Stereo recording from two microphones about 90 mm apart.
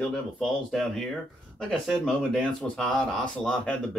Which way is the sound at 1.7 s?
5° left (ahead or behind).